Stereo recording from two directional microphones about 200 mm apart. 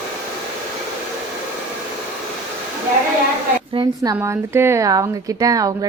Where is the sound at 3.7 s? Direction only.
20° right (ahead or behind).